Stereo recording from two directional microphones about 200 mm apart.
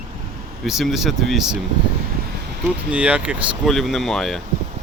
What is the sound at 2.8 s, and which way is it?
Speech, 5° right (ahead or behind).